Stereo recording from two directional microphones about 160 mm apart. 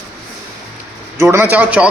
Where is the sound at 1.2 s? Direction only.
15° right (ahead or behind).